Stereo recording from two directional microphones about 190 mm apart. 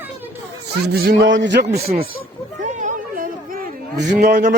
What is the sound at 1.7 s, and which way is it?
Speech, 55° right (ahead or behind).